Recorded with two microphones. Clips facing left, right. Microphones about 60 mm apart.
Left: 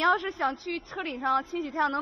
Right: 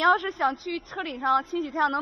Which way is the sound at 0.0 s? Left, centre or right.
Right.